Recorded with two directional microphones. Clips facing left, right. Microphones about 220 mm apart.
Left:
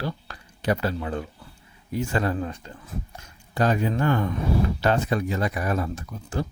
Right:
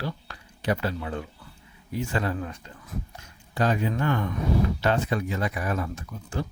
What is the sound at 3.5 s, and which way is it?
Speech, 45° left (ahead or behind).